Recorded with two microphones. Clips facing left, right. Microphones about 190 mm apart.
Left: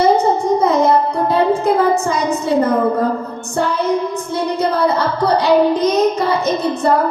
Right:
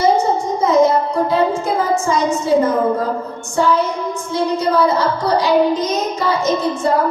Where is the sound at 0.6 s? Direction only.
60° left (ahead or behind).